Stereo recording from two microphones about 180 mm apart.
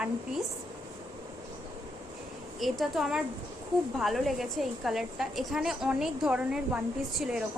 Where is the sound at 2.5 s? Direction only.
Centre (ahead or behind).